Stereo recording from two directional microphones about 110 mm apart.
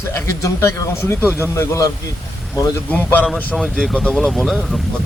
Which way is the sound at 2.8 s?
15° left (ahead or behind).